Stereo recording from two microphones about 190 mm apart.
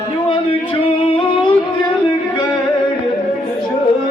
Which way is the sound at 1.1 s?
25° left (ahead or behind).